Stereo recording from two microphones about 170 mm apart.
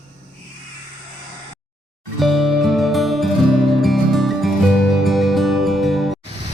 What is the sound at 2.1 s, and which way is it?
Music, centre (ahead or behind).